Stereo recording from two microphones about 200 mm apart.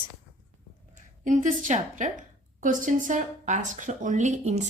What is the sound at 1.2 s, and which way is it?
Speech, 40° right (ahead or behind).